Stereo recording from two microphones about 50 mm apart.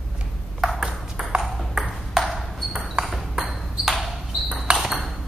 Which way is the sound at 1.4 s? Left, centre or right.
Centre.